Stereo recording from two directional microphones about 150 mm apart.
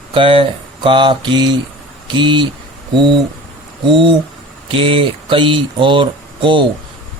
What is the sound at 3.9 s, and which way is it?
Speech, 35° right (ahead or behind).